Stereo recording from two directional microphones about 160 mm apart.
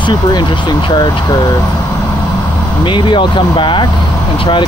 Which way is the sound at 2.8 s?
30° left (ahead or behind).